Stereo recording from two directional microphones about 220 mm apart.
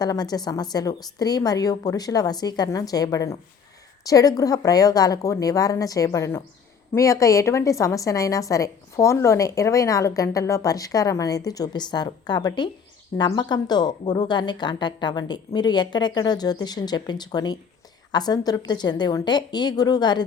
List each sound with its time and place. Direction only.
0.0 s a woman's voice: 15° left (ahead or behind)